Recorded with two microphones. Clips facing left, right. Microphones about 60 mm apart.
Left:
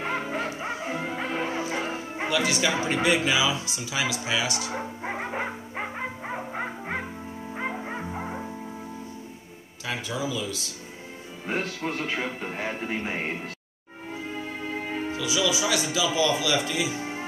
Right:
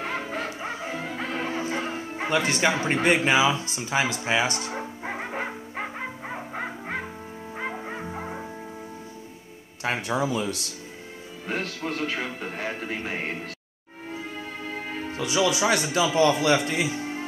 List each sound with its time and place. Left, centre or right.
0.0 s music: centre
2.2 s speech: right
4.6 s music: centre
9.8 s speech: right
11.4 s a man's voice: centre
15.1 s speech: right